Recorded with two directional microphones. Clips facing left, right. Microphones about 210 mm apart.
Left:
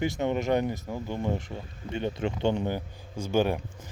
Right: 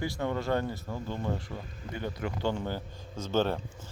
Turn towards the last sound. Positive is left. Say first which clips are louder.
# left 3 dB
turn(degrees=15)  # may be behind; listen again after turning